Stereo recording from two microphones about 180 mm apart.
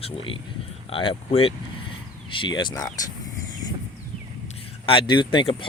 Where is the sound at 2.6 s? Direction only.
25° left (ahead or behind).